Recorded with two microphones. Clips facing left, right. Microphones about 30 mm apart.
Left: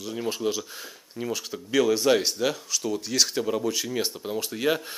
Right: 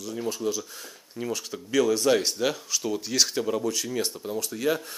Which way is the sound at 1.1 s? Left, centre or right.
Centre.